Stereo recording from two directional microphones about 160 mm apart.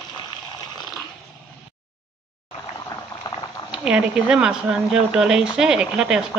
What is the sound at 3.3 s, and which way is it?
Boiling, 25° left (ahead or behind).